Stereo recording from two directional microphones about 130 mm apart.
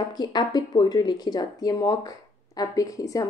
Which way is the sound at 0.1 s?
30° left (ahead or behind).